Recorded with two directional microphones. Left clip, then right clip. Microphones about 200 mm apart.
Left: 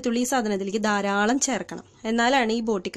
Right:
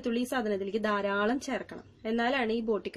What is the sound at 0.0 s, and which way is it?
Speech, 45° left (ahead or behind).